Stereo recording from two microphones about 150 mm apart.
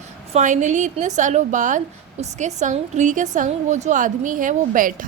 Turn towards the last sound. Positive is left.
turn(degrees=-60)  # may be behind; listen again after turning